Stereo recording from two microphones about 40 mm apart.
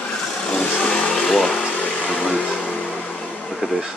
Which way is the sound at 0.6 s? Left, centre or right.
Left.